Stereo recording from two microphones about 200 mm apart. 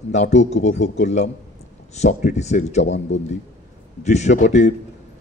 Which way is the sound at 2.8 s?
65° left (ahead or behind).